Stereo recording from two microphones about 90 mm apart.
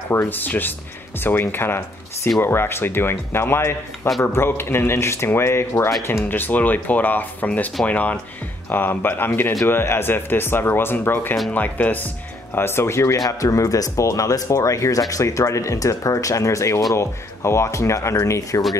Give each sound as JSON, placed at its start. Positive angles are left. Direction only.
{"t": 0.1, "sound": "speech", "side_deg": 25}